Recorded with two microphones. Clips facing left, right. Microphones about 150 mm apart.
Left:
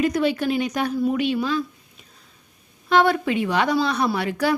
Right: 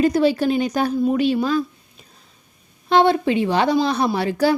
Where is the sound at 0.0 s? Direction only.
35° right (ahead or behind).